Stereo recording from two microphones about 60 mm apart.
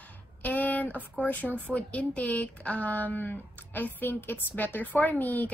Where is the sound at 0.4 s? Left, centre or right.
Left.